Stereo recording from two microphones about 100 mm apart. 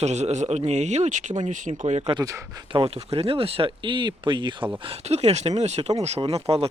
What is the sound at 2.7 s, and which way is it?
Speech, 65° right (ahead or behind).